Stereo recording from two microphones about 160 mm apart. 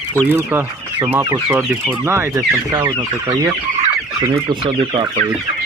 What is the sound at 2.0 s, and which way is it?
Speech, 15° right (ahead or behind).